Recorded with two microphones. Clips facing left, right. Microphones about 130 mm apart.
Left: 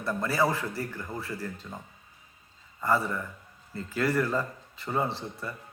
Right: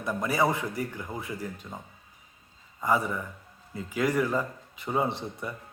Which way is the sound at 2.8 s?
15° right (ahead or behind).